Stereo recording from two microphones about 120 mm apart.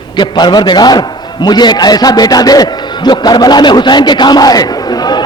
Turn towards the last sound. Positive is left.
turn(degrees=35)  # may be behind; listen again after turning